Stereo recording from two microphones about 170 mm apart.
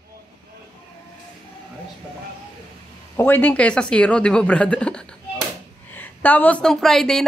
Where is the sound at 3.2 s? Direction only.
10° left (ahead or behind).